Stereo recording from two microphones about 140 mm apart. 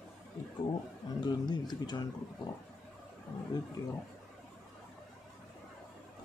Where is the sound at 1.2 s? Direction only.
30° left (ahead or behind).